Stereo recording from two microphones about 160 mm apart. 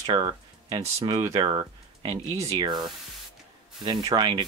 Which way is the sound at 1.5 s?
35° right (ahead or behind).